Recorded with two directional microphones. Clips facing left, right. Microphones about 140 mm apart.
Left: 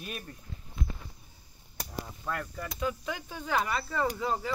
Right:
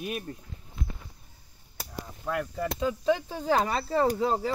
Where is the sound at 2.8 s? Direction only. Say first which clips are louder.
Right 7 dB; 30° right (ahead or behind).